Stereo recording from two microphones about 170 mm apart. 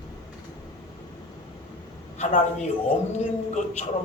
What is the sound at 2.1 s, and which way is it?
A man's voice, 40° left (ahead or behind).